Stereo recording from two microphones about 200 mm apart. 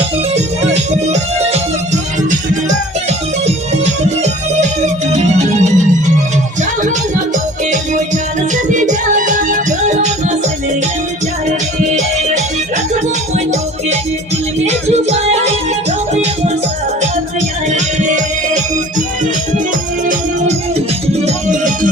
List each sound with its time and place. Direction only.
0.3 s music: 35° right (ahead or behind)
7.7 s music: 35° right (ahead or behind)
11.9 s music: 35° right (ahead or behind)
17.7 s music: 35° right (ahead or behind)